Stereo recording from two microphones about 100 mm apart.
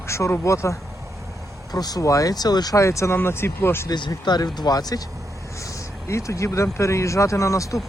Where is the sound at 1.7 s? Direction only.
40° left (ahead or behind); by 3.9 s 25° left (ahead or behind).